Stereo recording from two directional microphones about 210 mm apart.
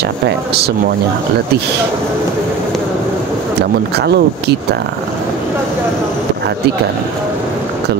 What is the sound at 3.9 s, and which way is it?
Speech, 50° right (ahead or behind).